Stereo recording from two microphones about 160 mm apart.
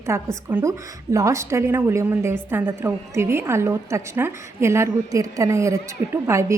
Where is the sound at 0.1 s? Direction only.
15° right (ahead or behind).